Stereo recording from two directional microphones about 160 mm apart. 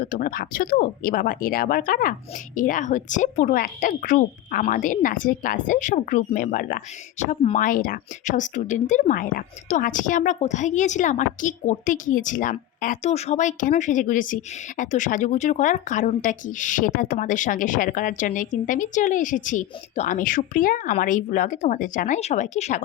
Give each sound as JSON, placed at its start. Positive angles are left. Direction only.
{"t": 0.0, "sound": "a woman's voice", "side_deg": 60}